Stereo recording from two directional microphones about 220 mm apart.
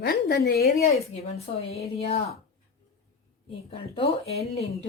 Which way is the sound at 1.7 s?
30° left (ahead or behind).